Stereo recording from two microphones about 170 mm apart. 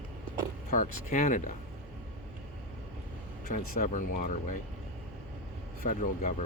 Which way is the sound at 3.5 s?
50° left (ahead or behind).